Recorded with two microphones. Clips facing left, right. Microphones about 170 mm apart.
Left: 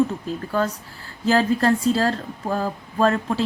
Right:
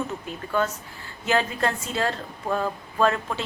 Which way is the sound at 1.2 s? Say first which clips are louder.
Left 5 dB; 35° left (ahead or behind).